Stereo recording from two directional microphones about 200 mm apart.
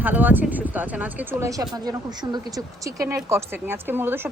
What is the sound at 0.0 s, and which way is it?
A woman's voice, 10° right (ahead or behind).